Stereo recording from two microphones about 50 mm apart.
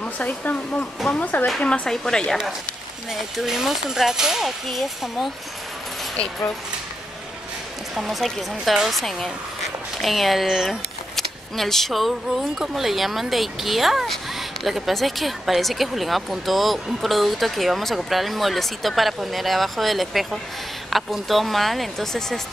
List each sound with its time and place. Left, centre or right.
0.0 s speech: left
1.9 s a woman's voice: centre
3.1 s speech: centre
7.9 s speech: centre
11.1 s speech: centre